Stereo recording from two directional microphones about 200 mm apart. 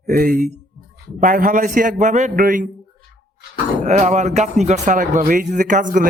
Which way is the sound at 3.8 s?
35° right (ahead or behind).